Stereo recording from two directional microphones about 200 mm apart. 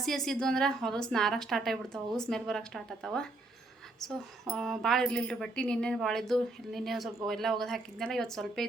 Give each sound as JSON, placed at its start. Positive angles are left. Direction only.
{"t": 0.0, "sound": "a woman's voice", "side_deg": 0}